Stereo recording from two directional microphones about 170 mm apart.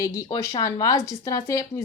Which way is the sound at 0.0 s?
20° left (ahead or behind).